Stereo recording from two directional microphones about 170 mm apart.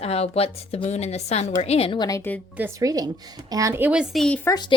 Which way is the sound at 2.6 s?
15° right (ahead or behind).